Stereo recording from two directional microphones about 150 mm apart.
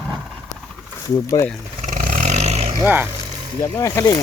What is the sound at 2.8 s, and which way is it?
Speech, 10° right (ahead or behind).